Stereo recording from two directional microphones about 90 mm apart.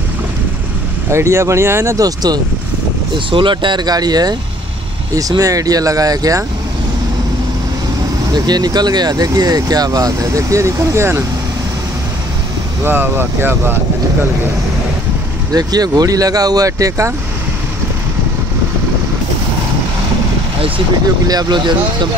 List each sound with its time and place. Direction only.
1.1 s speech: 30° right (ahead or behind)
2.0 s speech: 45° right (ahead or behind)
3.3 s speech: 65° right (ahead or behind); by 4.4 s 50° right (ahead or behind)
5.4 s speech: 40° right (ahead or behind)
8.3 s speech: 50° right (ahead or behind); by 11.2 s 30° right (ahead or behind)
12.8 s speech: 25° right (ahead or behind)
15.5 s speech: 45° right (ahead or behind)
21.3 s speech: 50° right (ahead or behind)